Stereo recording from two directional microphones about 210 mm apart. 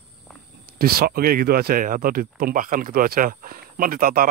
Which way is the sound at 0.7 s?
45° right (ahead or behind).